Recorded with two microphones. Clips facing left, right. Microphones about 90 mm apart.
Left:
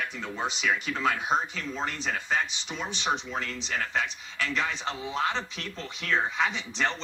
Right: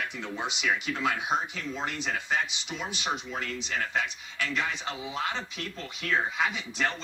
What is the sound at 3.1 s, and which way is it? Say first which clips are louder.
A man's voice: left 2 dB; 30° left (ahead or behind).